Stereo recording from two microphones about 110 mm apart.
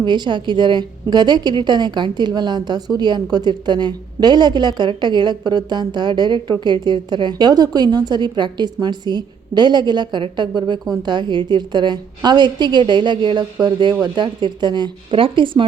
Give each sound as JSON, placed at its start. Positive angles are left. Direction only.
{"t": 0.0, "sound": "a woman's voice", "side_deg": -45}